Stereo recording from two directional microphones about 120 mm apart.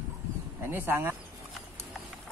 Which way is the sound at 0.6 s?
20° right (ahead or behind).